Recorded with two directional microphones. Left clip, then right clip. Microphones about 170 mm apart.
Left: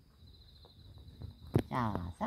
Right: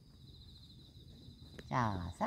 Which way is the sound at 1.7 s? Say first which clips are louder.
Even; 20° left (ahead or behind).